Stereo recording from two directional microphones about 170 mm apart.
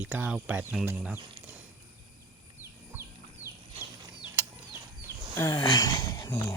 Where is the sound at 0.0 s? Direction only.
10° right (ahead or behind).